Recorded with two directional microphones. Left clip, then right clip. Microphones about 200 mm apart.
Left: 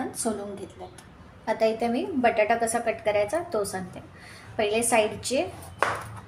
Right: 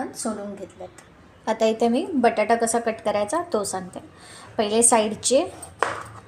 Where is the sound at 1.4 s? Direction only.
35° right (ahead or behind).